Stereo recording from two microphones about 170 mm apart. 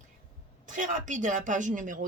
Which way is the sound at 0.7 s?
50° right (ahead or behind).